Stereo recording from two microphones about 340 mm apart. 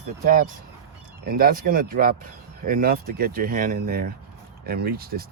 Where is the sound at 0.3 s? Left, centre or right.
Right.